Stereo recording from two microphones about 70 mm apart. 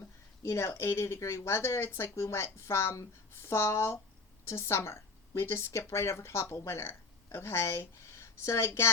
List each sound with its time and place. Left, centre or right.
0.4 s a woman's voice: left